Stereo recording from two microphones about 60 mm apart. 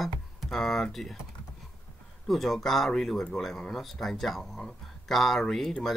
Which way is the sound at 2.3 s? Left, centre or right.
Centre.